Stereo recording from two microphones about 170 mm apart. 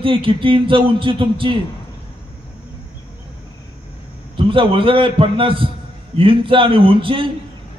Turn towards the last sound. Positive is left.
turn(degrees=-30)  # may be behind; listen again after turning